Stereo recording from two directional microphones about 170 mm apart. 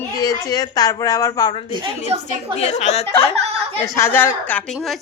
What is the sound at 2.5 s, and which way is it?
Speech, 40° left (ahead or behind).